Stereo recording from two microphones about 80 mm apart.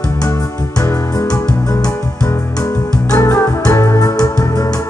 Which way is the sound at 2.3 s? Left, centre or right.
Left.